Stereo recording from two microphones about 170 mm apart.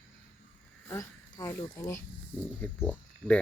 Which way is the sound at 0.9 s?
20° left (ahead or behind).